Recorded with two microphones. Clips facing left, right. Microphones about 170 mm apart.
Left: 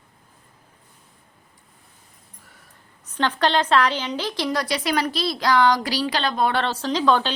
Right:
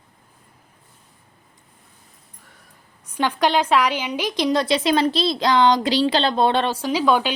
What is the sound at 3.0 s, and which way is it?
A woman's voice, 10° right (ahead or behind).